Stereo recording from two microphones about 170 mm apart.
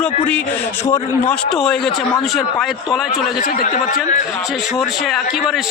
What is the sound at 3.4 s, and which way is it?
Speech, 50° left (ahead or behind).